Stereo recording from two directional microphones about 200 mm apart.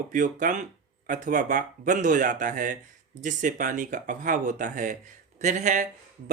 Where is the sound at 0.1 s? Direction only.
40° right (ahead or behind).